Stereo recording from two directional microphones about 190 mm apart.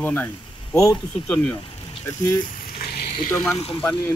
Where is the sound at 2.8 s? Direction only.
55° left (ahead or behind).